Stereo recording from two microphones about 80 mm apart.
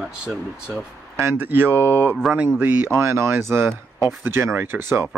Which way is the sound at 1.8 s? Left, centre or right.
Left.